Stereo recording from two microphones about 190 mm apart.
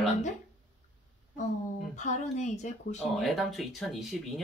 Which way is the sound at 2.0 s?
40° left (ahead or behind).